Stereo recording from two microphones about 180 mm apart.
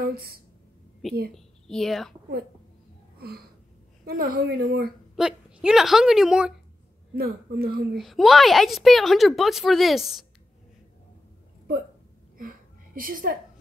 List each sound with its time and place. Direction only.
0.0 s a woman's voice: 60° right (ahead or behind)
1.3 s a woman's voice: centre (ahead or behind)
3.2 s a sound: 60° right (ahead or behind)
4.0 s a woman's voice: 55° right (ahead or behind)
5.1 s a woman's voice: 5° right (ahead or behind)
7.2 s a woman's voice: 60° right (ahead or behind)
8.0 s a woman's voice: centre (ahead or behind)
12.4 s a sound: 50° right (ahead or behind)